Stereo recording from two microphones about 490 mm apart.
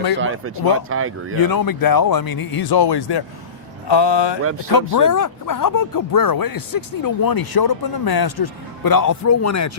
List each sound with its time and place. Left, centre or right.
0.2 s speech: right
1.4 s speech: left
4.7 s speech: left